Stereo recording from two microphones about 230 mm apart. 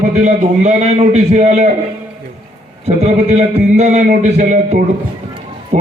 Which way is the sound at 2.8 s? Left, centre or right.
Right.